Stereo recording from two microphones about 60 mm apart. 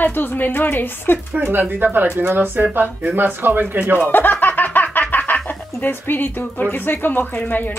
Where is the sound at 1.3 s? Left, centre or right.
Right.